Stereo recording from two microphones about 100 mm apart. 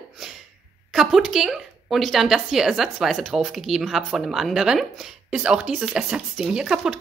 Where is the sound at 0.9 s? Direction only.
Centre (ahead or behind).